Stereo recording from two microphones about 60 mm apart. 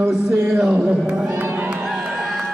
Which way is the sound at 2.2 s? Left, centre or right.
Centre.